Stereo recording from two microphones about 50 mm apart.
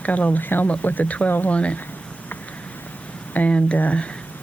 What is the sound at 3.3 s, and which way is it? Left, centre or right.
Speech, left.